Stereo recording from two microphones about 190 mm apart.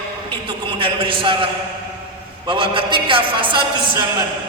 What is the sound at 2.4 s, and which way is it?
A woman's voice, 25° right (ahead or behind).